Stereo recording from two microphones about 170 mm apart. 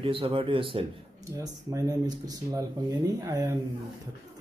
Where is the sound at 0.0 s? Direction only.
30° right (ahead or behind).